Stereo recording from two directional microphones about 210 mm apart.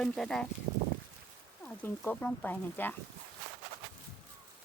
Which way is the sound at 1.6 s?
5° left (ahead or behind).